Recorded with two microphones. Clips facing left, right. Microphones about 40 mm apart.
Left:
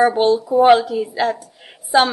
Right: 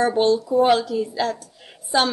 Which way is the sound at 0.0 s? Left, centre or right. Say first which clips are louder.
Left 4 dB; centre.